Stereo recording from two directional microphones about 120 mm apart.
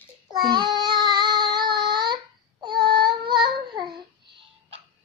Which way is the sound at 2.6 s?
40° right (ahead or behind).